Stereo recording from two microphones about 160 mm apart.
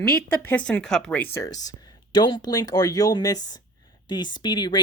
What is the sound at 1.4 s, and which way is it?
Speech, 25° left (ahead or behind).